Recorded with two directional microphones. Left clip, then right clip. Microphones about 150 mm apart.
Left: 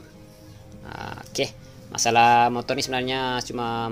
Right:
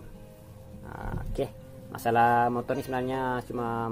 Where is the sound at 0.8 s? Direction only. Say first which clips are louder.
Left 5 dB; 30° left (ahead or behind).